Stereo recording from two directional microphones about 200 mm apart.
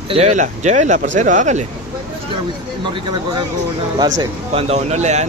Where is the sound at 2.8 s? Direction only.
25° right (ahead or behind).